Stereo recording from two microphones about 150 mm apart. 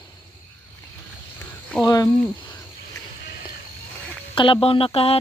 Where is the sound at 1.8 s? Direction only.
25° left (ahead or behind).